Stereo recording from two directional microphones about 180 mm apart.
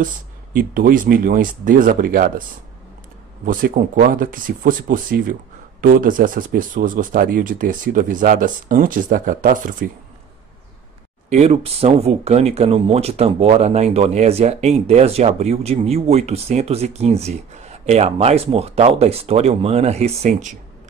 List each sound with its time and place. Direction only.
0.0 s speech: 50° right (ahead or behind)
3.4 s speech: 50° right (ahead or behind)
11.2 s speech: 35° right (ahead or behind)